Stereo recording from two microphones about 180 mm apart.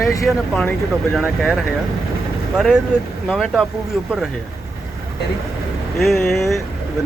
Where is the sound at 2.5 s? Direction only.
5° right (ahead or behind).